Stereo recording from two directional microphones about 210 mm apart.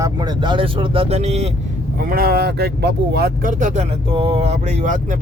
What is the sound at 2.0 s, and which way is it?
Speech, 45° right (ahead or behind).